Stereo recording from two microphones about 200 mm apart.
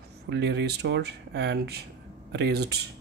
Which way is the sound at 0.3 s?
60° right (ahead or behind).